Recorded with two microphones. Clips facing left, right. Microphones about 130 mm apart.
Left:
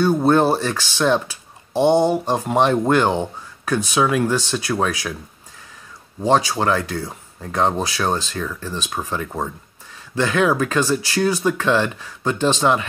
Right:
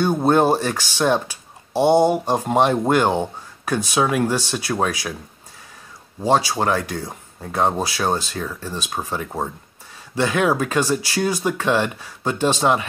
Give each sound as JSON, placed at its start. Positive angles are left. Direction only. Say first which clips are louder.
{"t": 0.0, "sound": "speech", "louder": "left 1 dB", "side_deg": -15}
{"t": 6.2, "sound": "speech", "louder": "left 1 dB", "side_deg": -15}